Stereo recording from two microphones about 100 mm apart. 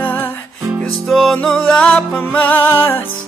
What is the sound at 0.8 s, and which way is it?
Music, centre (ahead or behind).